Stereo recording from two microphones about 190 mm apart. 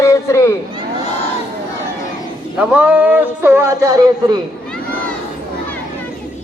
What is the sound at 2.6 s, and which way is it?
Speech, 5° right (ahead or behind).